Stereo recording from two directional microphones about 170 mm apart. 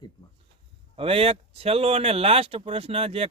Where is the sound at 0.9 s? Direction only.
35° right (ahead or behind).